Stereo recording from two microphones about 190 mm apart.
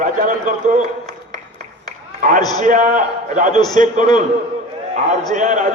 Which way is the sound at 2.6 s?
40° right (ahead or behind).